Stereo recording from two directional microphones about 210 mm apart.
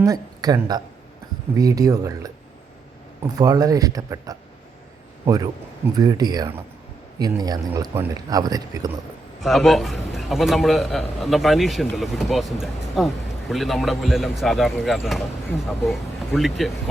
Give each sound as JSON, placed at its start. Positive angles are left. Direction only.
{"t": 0.0, "sound": "a woman's voice", "side_deg": -15}
{"t": 9.4, "sound": "speech", "side_deg": 0}